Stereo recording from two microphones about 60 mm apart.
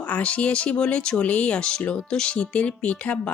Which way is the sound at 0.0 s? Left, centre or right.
Left.